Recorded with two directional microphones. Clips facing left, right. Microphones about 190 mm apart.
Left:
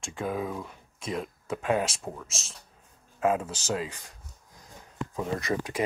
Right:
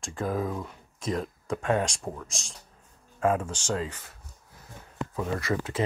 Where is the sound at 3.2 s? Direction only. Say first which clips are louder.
Even; 25° left (ahead or behind).